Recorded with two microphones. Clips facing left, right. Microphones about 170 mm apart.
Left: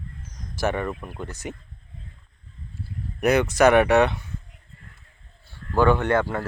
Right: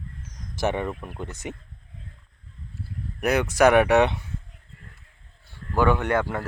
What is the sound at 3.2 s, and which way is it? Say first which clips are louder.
Speech: left 1 dB; 10° right (ahead or behind).